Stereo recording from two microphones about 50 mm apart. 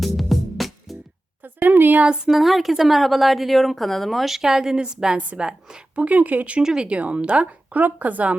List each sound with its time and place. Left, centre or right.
0.0 s music: centre
1.6 s a sound: right
2.3 s a woman's voice: centre
5.3 s a woman's voice: right
6.6 s a woman's voice: centre